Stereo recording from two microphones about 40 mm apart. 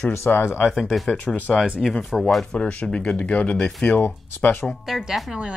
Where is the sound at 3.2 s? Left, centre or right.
Left.